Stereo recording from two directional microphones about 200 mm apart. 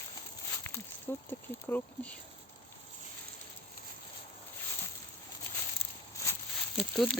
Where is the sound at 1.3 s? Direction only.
10° left (ahead or behind).